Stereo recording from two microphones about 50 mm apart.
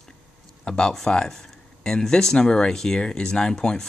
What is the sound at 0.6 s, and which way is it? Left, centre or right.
Speech, centre.